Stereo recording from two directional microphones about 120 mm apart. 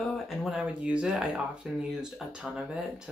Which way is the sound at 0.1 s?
Centre (ahead or behind).